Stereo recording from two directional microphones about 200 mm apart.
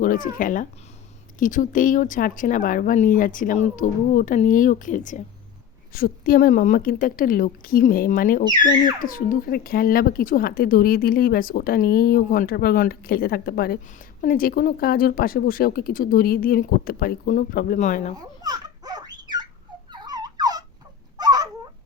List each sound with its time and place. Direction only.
0.0 s speech: 45° left (ahead or behind)
18.2 s babbling: 20° right (ahead or behind)
19.9 s turkey: 20° right (ahead or behind)
21.2 s a sound: 20° right (ahead or behind)